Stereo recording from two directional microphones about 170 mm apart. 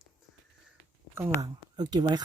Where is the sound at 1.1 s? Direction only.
15° right (ahead or behind).